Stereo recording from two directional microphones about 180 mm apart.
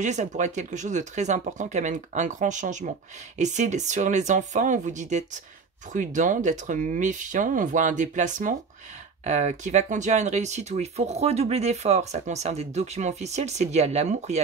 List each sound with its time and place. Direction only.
0.0 s speech: 40° right (ahead or behind)